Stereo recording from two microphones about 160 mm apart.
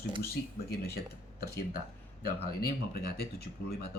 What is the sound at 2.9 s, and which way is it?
Speech, 80° left.